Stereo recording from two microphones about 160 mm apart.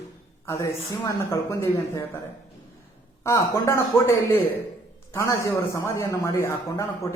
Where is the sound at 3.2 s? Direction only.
20° left (ahead or behind).